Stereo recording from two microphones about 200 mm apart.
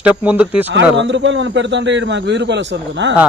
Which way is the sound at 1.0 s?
65° right (ahead or behind).